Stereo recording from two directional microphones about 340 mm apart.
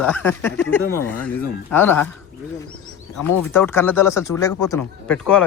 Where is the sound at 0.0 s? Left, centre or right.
Centre.